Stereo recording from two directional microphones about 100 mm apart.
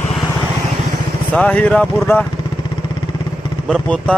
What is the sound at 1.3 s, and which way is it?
Speech, 15° left (ahead or behind).